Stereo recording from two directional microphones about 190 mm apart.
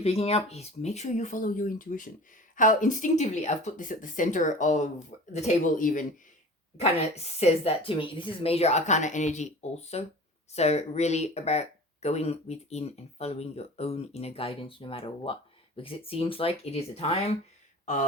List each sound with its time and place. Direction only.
0.0 s speech: 30° left (ahead or behind)
7.3 s speech: 30° left (ahead or behind)